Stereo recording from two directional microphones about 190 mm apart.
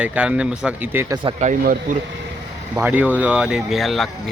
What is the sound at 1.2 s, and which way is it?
Speech, 35° right (ahead or behind).